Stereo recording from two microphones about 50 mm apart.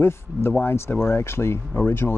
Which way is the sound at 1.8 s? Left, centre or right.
Left.